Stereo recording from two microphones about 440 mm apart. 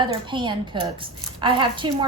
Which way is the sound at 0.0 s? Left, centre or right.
Centre.